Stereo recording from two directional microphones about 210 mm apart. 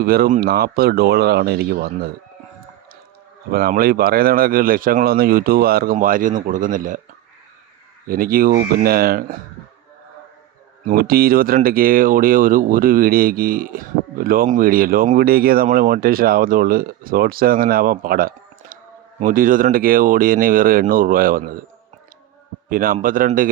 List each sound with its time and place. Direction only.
0.0 s speech: 45° right (ahead or behind)
3.5 s speech: 45° right (ahead or behind)
8.0 s speech: 45° right (ahead or behind)
10.8 s speech: 45° right (ahead or behind)
22.7 s a man's voice: 40° right (ahead or behind)